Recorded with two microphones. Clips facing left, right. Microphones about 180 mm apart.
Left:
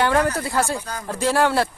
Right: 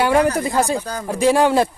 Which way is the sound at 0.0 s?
15° right (ahead or behind).